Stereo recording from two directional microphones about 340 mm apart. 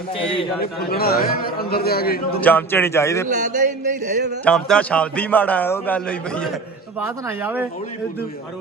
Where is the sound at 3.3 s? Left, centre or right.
Right.